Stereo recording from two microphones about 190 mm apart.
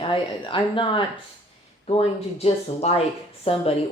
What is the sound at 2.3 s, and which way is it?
Speech, 35° left (ahead or behind).